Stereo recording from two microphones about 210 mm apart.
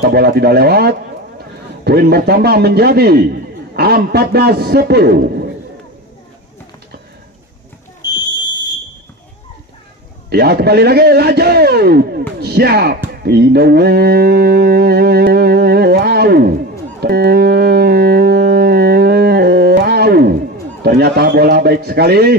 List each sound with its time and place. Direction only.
0.0 s a man's voice: 50° right (ahead or behind)
8.0 s fire alarm: 20° left (ahead or behind)
10.3 s a man's voice: 50° right (ahead or behind)
13.2 s mantra: 50° right (ahead or behind)
17.0 s music: 50° right (ahead or behind)
20.8 s a man's voice: 50° right (ahead or behind)